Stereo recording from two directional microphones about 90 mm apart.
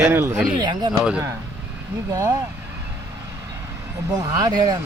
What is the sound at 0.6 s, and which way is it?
Speech, 55° right (ahead or behind).